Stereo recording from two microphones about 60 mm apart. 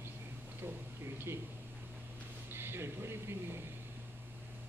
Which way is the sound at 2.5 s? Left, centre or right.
Right.